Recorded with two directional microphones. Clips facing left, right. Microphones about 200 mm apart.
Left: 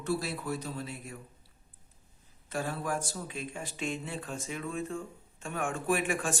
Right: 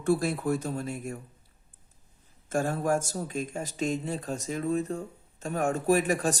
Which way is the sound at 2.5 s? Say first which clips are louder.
Right 7 dB; 45° right (ahead or behind).